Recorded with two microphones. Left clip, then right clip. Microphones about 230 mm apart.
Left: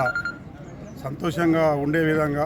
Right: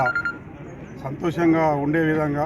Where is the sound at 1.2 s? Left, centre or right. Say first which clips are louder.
Right 1 dB; left.